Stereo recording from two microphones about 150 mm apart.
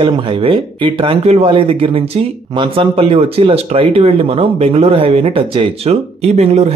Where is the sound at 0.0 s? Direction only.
35° right (ahead or behind).